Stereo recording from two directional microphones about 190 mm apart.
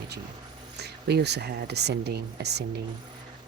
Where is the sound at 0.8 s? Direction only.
60° right (ahead or behind).